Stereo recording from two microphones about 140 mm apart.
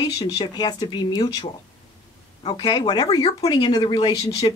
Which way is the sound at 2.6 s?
30° left (ahead or behind).